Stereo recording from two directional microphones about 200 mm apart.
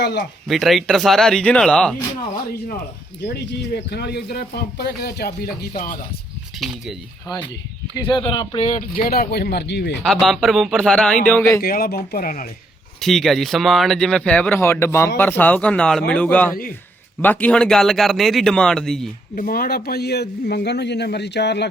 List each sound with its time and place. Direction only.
0.0 s speech: 55° left (ahead or behind)
0.4 s speech: centre (ahead or behind)
3.3 s speech: 55° left (ahead or behind)
6.6 s speech: centre (ahead or behind)
7.9 s speech: 20° left (ahead or behind); by 9.9 s 55° left (ahead or behind)
10.0 s speech: centre (ahead or behind)
11.6 s speech: 50° left (ahead or behind)
13.0 s speech: centre (ahead or behind)
19.4 s speech: 45° left (ahead or behind)